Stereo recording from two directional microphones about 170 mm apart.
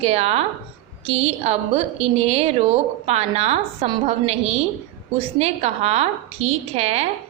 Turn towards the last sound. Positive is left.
turn(degrees=-35)  # may be behind; listen again after turning